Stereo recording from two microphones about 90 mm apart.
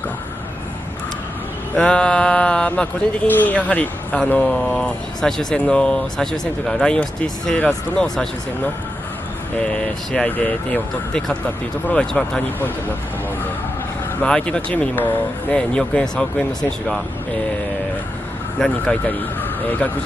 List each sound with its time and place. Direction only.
1.8 s speech: 10° left (ahead or behind)
9.7 s speech: 10° left (ahead or behind)
14.2 s speech: 10° left (ahead or behind)
18.6 s speech: 5° left (ahead or behind)